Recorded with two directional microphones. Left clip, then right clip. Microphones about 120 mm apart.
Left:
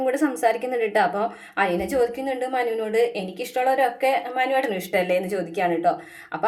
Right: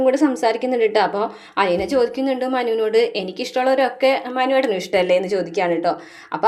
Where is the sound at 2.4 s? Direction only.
35° right (ahead or behind).